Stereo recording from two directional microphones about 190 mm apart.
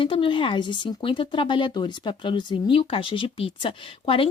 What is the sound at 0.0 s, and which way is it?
Speech, 25° left (ahead or behind).